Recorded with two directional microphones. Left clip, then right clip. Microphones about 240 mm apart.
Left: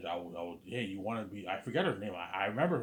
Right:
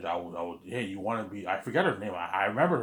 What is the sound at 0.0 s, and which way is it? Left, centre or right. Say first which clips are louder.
Speech: right 6 dB; right.